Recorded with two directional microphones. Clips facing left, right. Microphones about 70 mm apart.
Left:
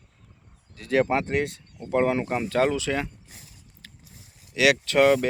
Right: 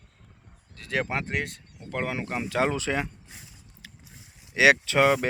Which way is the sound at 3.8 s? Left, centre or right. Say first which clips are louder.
Right 1 dB; centre.